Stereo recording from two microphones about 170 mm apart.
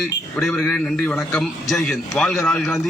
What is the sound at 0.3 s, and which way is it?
A man's voice, 5° left (ahead or behind).